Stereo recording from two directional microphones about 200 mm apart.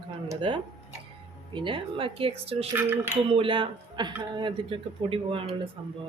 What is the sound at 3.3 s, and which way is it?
A man's voice, 25° right (ahead or behind).